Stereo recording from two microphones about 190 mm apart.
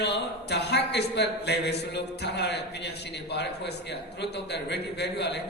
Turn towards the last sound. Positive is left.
turn(degrees=60)  # may be behind; listen again after turning